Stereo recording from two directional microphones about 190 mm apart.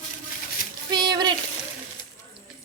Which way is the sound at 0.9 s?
20° right (ahead or behind).